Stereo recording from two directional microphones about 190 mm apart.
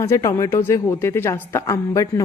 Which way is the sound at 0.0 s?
15° left (ahead or behind).